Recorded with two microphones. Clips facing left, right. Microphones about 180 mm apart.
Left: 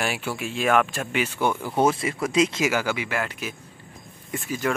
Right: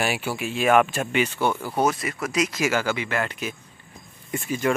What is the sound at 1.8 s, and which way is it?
Speech, 25° left (ahead or behind).